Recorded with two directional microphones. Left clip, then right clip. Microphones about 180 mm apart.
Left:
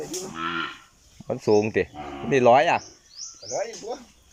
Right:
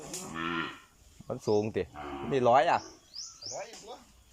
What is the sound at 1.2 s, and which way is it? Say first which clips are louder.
Speech: left 8 dB; 15° left (ahead or behind).